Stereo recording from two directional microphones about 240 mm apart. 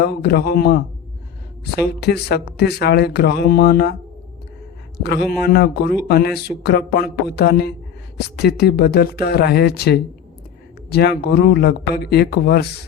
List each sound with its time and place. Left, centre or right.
0.0 s speech: left
5.0 s speech: left